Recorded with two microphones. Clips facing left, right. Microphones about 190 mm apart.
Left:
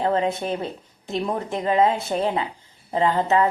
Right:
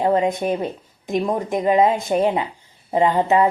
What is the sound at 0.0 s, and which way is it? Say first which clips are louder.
A woman's voice: right 4 dB; 15° right (ahead or behind).